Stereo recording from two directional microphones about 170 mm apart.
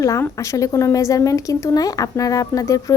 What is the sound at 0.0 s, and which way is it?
Speech, 15° left (ahead or behind).